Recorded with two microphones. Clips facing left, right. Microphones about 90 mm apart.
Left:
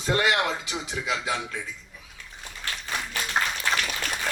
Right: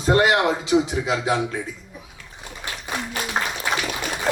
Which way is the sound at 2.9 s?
10° right (ahead or behind).